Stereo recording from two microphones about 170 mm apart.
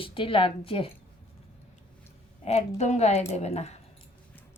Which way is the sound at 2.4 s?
40° left (ahead or behind).